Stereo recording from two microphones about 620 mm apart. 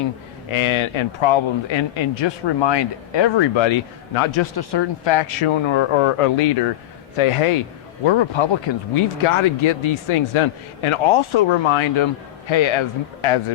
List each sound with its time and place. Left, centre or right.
0.5 s speech: left
4.5 s a man's voice: left